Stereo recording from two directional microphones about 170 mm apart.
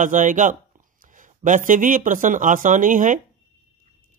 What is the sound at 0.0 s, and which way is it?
Speech, 50° right (ahead or behind).